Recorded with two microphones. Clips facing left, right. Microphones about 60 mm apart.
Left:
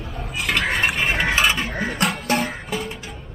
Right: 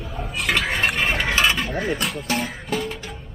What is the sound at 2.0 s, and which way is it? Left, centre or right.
Speech, left.